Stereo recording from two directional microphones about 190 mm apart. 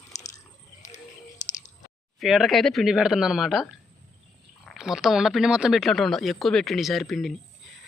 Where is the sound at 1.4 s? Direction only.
40° left (ahead or behind).